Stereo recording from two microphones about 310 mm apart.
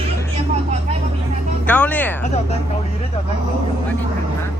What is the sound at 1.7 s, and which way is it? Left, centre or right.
Speech, centre.